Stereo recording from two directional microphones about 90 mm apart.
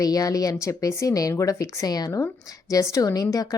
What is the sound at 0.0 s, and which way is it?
Speech, 45° left (ahead or behind).